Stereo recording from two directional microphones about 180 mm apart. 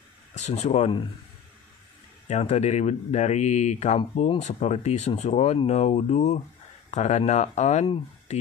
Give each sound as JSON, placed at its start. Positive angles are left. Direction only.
{"t": 0.4, "sound": "speech", "side_deg": 35}
{"t": 2.2, "sound": "speech", "side_deg": 40}